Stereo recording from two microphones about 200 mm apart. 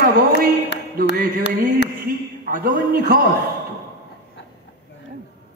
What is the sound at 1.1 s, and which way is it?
Music, 50° right (ahead or behind).